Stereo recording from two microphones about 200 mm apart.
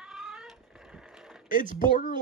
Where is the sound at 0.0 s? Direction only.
Centre (ahead or behind).